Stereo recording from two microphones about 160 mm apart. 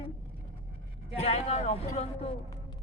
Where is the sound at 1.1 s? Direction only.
40° left (ahead or behind).